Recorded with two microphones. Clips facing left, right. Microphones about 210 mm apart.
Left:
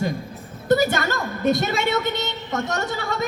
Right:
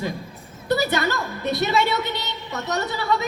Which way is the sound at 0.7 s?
50° left (ahead or behind).